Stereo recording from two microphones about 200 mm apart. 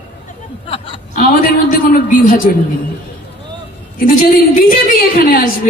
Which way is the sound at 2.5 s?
40° left (ahead or behind).